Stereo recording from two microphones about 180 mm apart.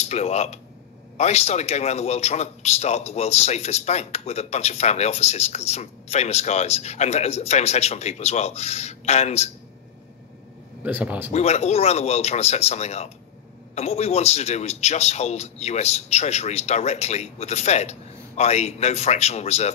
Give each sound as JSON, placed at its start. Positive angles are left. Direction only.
{"t": 0.0, "sound": "a man's voice", "side_deg": 35}
{"t": 10.8, "sound": "speech", "side_deg": -10}
{"t": 11.3, "sound": "a man's voice", "side_deg": 35}